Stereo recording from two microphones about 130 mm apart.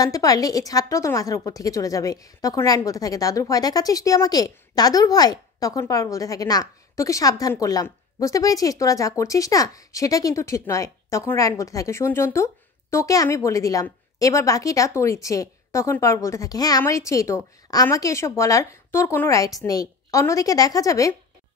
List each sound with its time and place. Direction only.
0.0 s a woman's voice: 30° left (ahead or behind)